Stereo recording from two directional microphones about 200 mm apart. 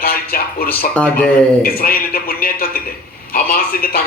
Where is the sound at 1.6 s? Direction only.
45° left (ahead or behind).